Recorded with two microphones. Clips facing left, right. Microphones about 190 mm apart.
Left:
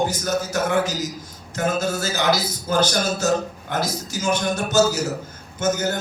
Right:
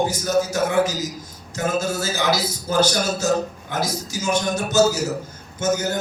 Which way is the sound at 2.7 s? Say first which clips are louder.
Right 1 dB; 55° left (ahead or behind).